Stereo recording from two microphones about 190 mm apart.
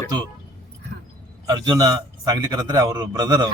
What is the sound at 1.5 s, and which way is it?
A man's voice, 20° right (ahead or behind).